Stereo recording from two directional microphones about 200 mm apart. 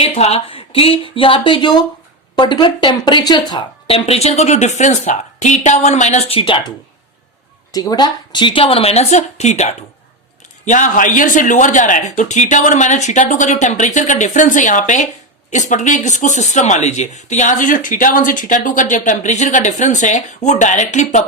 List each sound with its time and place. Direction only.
0.0 s a woman's voice: 30° left (ahead or behind)